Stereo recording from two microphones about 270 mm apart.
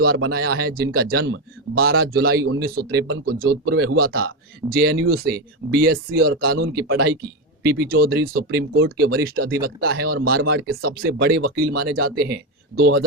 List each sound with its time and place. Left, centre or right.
0.2 s speech: right